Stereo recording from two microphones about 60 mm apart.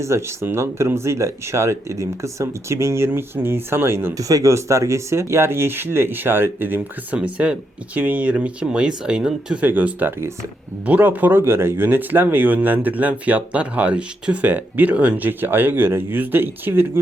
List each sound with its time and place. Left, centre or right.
0.0 s speech: right
3.1 s speech: right
4.2 s speech: right
7.1 s speech: right
9.6 s speech: right
15.3 s speech: right